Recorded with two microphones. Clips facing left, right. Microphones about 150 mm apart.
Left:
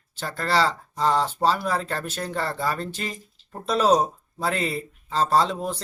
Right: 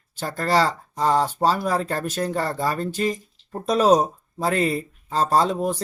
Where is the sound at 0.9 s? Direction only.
15° right (ahead or behind).